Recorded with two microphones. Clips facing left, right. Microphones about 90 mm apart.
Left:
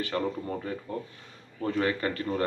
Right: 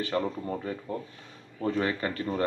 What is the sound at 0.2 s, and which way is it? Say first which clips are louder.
A man's voice: even; 15° right (ahead or behind).